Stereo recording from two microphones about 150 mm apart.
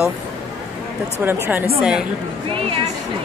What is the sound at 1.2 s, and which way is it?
Speech, 10° right (ahead or behind).